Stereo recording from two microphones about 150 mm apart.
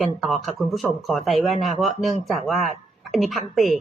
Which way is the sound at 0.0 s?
Centre (ahead or behind).